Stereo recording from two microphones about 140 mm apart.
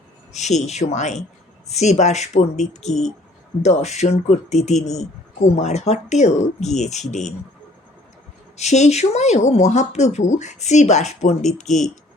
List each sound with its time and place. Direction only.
0.3 s speech: 55° left (ahead or behind)
8.5 s speech: 55° left (ahead or behind)